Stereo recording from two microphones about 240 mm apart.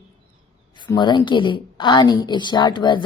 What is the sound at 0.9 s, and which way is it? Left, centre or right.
A woman's voice, centre.